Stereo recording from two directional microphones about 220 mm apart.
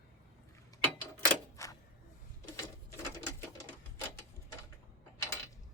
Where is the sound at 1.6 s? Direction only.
15° left (ahead or behind).